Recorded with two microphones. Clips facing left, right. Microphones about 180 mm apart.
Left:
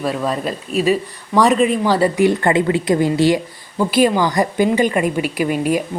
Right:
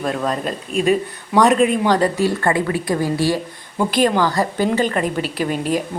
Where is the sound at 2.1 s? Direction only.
20° left (ahead or behind).